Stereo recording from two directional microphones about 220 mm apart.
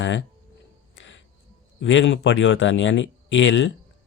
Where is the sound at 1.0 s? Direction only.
60° left (ahead or behind).